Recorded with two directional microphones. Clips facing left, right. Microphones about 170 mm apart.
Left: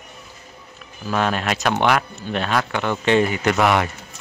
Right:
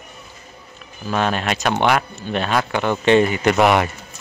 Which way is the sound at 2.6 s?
15° right (ahead or behind).